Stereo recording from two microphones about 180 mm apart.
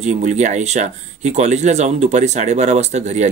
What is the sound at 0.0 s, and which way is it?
Speech, 40° right (ahead or behind).